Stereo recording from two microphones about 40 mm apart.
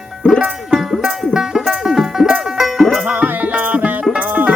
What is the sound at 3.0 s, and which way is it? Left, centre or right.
Music, right.